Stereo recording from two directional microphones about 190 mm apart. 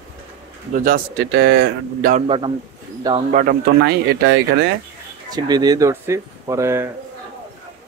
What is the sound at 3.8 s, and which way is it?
Speech, 60° right (ahead or behind).